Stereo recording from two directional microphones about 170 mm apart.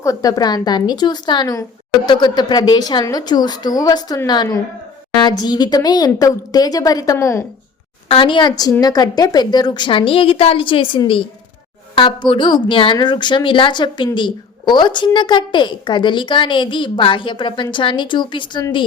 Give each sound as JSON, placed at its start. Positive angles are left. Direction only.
{"t": 0.0, "sound": "a woman's voice", "side_deg": 20}
{"t": 8.0, "sound": "a woman's voice", "side_deg": 30}